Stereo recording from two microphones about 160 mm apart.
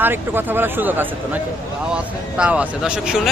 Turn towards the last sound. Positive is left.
turn(degrees=-5)  # may be behind; listen again after turning